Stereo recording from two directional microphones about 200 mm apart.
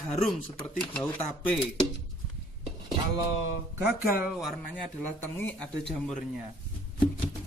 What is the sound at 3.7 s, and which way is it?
Speech, 10° right (ahead or behind).